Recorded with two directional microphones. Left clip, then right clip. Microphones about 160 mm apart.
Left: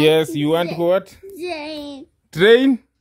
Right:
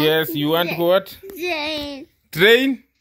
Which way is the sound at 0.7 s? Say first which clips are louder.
Right 1 dB; 10° left (ahead or behind).